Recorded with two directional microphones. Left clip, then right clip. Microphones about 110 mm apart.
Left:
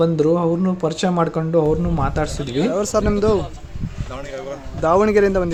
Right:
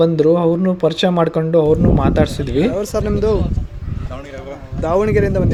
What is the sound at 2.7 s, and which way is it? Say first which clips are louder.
Speech: left 1 dB; 10° left (ahead or behind).